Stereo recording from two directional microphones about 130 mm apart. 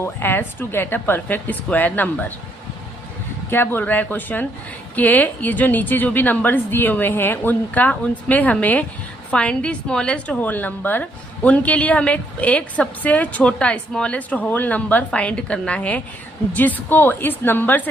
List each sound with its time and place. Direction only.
0.0 s a woman's voice: 15° left (ahead or behind)
3.5 s a woman's voice: 15° left (ahead or behind)